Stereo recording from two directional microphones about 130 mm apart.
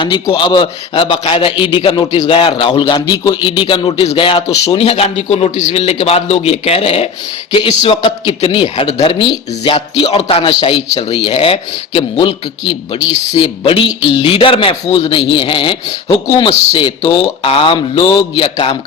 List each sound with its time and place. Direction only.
0.0 s a man's voice: 40° left (ahead or behind)